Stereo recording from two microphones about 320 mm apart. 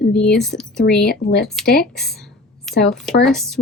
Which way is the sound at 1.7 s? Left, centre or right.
Centre.